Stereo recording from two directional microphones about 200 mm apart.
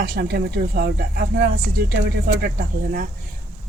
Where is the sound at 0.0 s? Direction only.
55° right (ahead or behind).